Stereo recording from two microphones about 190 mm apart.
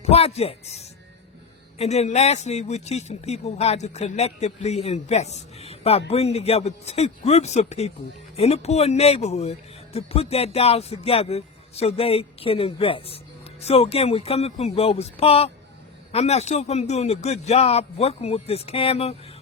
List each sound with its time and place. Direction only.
0.0 s speech: 35° left (ahead or behind)